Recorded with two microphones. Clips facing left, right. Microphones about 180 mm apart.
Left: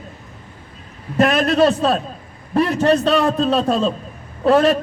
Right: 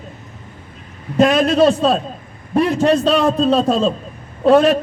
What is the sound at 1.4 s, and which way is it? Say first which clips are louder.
Speech: right 2 dB; 25° right (ahead or behind).